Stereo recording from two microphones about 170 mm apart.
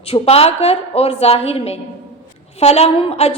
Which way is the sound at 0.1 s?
35° left (ahead or behind).